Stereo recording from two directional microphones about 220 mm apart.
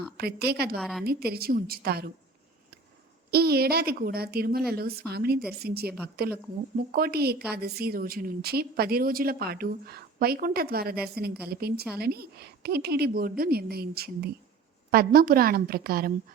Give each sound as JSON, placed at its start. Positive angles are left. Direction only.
{"t": 0.2, "sound": "a woman's voice", "side_deg": -45}
{"t": 0.8, "sound": "a woman's voice", "side_deg": 0}
{"t": 1.0, "sound": "a woman's voice", "side_deg": -45}
{"t": 3.3, "sound": "a woman's voice", "side_deg": -45}